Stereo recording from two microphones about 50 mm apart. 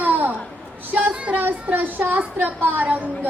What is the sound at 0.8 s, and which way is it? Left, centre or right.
Speech, right.